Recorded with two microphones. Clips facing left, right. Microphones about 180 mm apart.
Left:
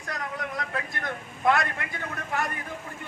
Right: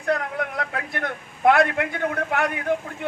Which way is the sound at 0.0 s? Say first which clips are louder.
Right 9 dB; 60° right (ahead or behind).